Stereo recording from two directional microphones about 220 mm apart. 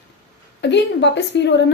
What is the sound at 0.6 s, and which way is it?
A woman's voice, 50° left (ahead or behind).